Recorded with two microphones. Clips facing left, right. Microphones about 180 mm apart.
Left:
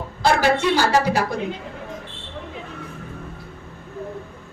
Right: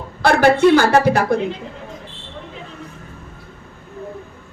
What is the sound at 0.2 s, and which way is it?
A woman's voice, 55° right (ahead or behind).